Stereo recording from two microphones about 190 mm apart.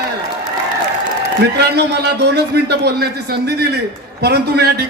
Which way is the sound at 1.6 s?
60° right (ahead or behind).